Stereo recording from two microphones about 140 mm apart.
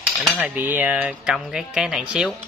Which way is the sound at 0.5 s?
10° right (ahead or behind).